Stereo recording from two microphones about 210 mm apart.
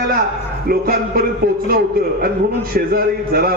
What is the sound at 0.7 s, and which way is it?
Speech, 45° right (ahead or behind).